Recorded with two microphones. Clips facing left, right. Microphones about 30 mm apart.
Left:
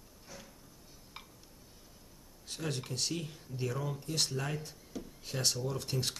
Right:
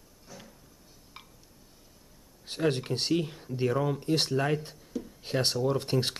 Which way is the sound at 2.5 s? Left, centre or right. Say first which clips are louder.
Right 10 dB; right.